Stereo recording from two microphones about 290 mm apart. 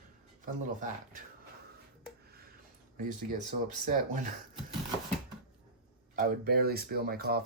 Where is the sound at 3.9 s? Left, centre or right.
Right.